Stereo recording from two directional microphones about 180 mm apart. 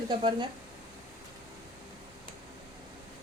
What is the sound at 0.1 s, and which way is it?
Speech, 25° right (ahead or behind).